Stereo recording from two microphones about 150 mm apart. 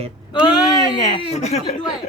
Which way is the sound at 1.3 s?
50° left (ahead or behind).